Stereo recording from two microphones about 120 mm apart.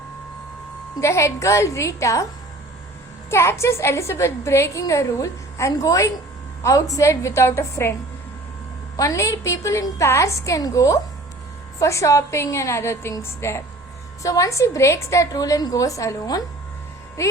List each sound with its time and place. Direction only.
1.0 s a woman's voice: 25° left (ahead or behind)
3.2 s a woman's voice: 20° left (ahead or behind)
9.0 s a woman's voice: 25° left (ahead or behind)